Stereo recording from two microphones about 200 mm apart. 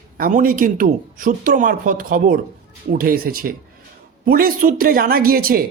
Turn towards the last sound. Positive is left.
turn(degrees=-45)  # may be behind; listen again after turning